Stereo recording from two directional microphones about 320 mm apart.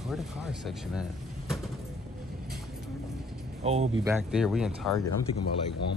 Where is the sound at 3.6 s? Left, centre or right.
Centre.